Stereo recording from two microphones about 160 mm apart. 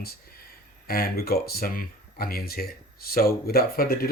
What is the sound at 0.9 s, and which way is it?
Speech, 70° left (ahead or behind).